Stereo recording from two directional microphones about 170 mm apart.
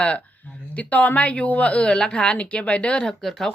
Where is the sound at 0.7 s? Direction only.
10° left (ahead or behind).